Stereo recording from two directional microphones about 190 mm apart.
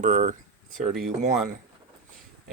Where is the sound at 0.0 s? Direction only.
40° right (ahead or behind).